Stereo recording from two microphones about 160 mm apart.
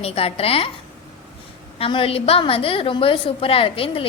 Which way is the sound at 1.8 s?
35° left (ahead or behind).